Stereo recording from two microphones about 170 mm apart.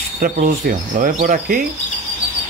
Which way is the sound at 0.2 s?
55° right (ahead or behind).